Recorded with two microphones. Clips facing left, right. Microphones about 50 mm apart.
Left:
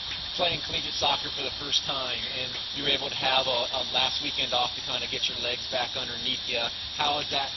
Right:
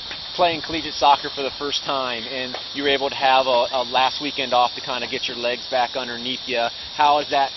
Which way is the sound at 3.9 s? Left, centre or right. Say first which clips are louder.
Right 10 dB; right.